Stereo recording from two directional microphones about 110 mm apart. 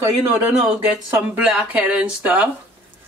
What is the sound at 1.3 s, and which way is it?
Speech, 10° right (ahead or behind).